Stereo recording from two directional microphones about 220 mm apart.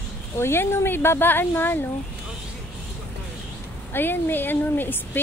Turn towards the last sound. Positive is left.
turn(degrees=10)  # may be behind; listen again after turning